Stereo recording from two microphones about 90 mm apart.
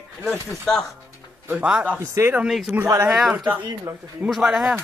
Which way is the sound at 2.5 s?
Centre (ahead or behind).